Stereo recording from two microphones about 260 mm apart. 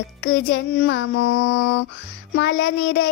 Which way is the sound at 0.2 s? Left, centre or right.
Left.